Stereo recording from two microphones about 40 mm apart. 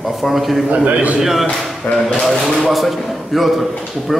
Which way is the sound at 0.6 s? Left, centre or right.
Right.